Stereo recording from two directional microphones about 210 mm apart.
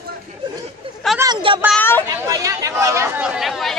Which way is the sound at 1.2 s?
20° right (ahead or behind).